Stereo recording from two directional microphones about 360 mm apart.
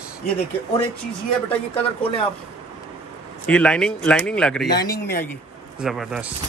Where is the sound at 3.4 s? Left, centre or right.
Centre.